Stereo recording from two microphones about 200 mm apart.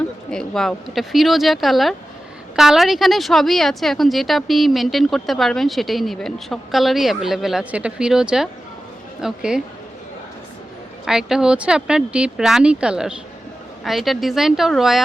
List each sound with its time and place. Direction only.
0.3 s a woman's voice: 5° left (ahead or behind)
11.0 s a woman's voice: 5° right (ahead or behind)